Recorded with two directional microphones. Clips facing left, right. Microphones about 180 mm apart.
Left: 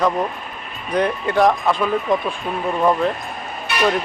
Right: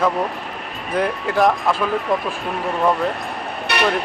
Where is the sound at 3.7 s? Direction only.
70° right (ahead or behind).